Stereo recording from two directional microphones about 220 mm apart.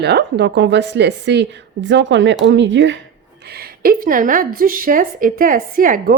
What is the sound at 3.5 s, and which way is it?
A woman's voice, 45° right (ahead or behind).